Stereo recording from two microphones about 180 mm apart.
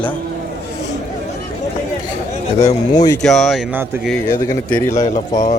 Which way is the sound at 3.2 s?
Centre (ahead or behind).